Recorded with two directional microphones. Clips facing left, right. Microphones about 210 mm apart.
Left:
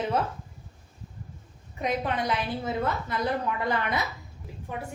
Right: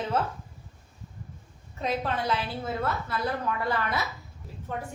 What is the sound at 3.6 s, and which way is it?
Speech, 20° left (ahead or behind).